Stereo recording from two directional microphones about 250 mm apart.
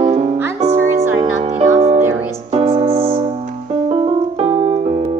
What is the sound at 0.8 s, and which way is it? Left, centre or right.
Music, centre.